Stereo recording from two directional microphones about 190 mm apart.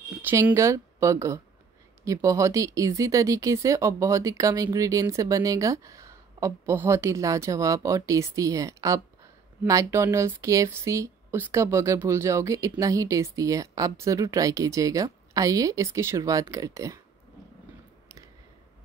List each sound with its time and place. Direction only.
0.2 s speech: 10° right (ahead or behind)